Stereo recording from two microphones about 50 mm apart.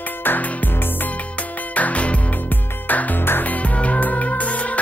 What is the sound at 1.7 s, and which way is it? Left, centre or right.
Music, left.